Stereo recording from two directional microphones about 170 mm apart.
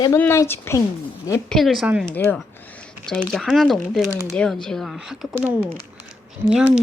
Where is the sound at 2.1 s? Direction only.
10° left (ahead or behind).